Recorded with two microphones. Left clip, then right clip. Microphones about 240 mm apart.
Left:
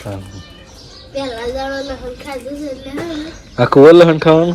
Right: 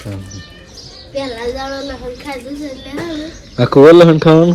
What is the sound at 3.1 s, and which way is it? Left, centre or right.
Speech, centre.